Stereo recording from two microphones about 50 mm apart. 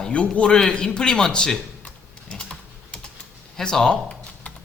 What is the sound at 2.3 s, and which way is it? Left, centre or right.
Typing, centre.